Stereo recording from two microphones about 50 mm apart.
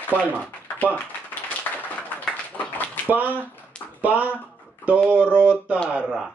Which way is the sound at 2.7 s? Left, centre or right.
Left.